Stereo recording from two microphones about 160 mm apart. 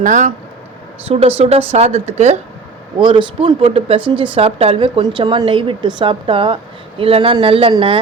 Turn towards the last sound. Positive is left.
turn(degrees=-35)  # may be behind; listen again after turning